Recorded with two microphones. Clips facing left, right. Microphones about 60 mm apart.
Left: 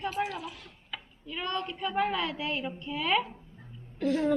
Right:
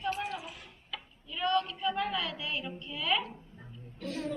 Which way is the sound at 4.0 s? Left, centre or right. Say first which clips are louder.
Left 10 dB; left.